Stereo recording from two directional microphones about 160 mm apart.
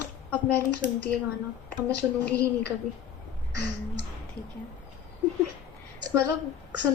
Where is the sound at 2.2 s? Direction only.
10° left (ahead or behind).